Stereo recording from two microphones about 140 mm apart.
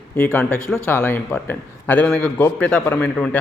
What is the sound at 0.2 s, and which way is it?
A man's voice, 15° left (ahead or behind).